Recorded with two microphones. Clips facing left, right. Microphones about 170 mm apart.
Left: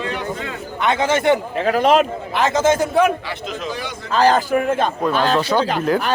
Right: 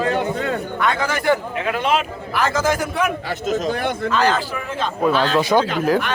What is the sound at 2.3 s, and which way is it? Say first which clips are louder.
Speech: left 3 dB; 20° left (ahead or behind).